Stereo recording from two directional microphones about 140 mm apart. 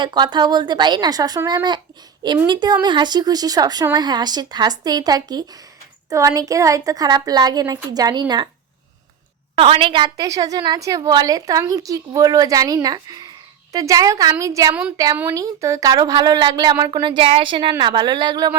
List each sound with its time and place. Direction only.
0.0 s a woman's voice: 30° right (ahead or behind)
9.6 s a woman's voice: 40° right (ahead or behind)